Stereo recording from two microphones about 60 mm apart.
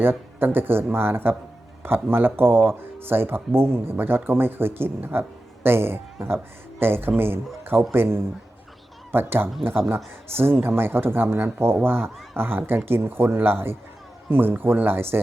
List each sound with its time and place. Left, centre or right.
0.0 s a man's voice: right